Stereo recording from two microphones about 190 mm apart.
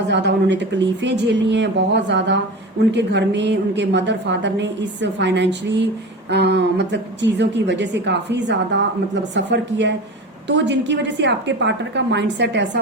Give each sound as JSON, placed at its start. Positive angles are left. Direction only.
{"t": 0.1, "sound": "a woman's voice", "side_deg": -65}